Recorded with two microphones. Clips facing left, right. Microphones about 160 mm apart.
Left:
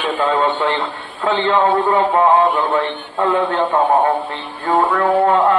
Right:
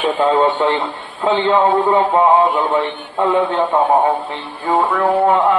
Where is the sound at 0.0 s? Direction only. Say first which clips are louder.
Right 3 dB; 20° right (ahead or behind).